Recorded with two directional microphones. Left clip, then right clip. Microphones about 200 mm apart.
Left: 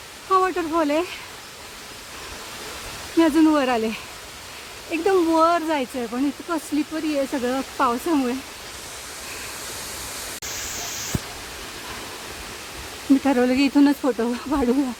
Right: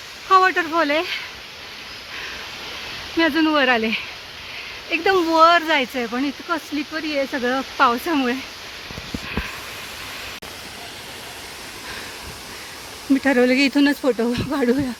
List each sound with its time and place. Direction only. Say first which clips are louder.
0.3 s speech: right 5 dB; 5° left (ahead or behind)
3.2 s speech: even; 5° left (ahead or behind)
6.9 s speech: right 4 dB; 15° left (ahead or behind)
7.4 s speech: right 7 dB; centre (ahead or behind)
13.2 s speech: right 6 dB; centre (ahead or behind)